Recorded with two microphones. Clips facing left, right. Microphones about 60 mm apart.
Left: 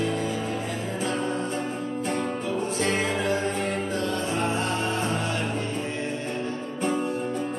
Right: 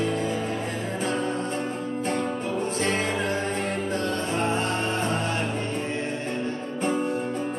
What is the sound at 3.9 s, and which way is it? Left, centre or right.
Music, right.